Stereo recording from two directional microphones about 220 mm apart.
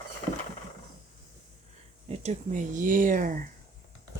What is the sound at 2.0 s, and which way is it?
Speech, 30° right (ahead or behind).